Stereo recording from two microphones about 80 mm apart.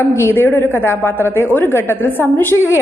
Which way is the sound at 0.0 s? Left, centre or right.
Left.